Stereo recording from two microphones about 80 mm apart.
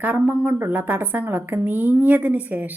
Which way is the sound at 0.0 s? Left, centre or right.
Right.